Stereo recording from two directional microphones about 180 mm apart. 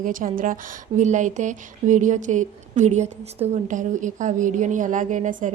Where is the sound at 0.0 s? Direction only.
45° right (ahead or behind).